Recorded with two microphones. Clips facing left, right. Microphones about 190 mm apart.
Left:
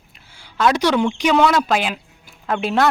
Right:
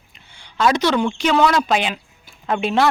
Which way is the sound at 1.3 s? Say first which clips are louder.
Even; centre (ahead or behind).